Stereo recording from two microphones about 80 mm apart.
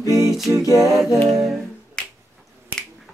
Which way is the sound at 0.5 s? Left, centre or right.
Right.